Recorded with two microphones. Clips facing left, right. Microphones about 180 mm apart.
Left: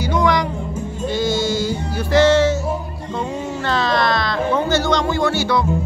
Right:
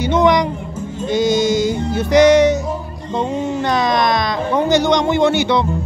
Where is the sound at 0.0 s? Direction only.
20° right (ahead or behind).